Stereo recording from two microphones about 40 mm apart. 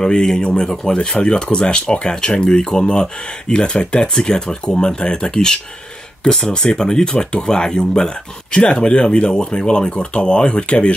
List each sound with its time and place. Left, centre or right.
0.0 s speech: centre